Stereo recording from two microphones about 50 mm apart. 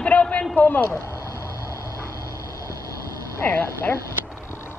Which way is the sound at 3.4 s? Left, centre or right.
Left.